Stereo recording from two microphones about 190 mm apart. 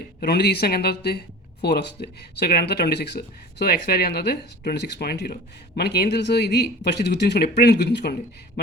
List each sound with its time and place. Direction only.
0.2 s speech: 60° left (ahead or behind)